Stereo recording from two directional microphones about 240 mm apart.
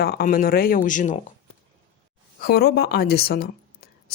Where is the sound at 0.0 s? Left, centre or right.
Left.